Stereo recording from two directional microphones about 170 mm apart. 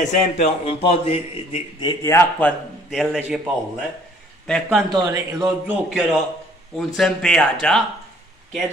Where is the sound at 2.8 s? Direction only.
Centre (ahead or behind).